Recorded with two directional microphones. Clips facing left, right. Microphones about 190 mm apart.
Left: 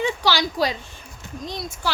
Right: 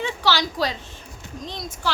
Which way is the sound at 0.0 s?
15° left (ahead or behind).